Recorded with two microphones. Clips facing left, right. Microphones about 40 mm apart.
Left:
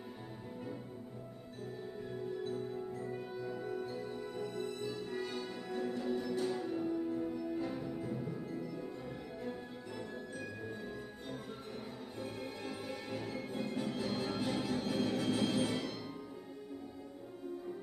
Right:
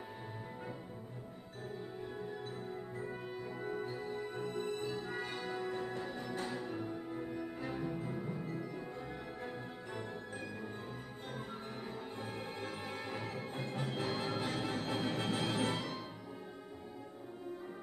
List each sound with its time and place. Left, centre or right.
3.2 s music: right
12.2 s music: right